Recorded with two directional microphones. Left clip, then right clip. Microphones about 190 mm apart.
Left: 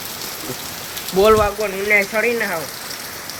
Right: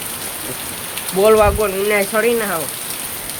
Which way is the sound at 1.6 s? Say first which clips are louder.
Even; 20° right (ahead or behind).